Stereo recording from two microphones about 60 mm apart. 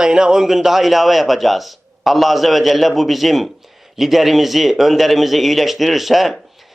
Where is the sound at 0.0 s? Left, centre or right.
Centre.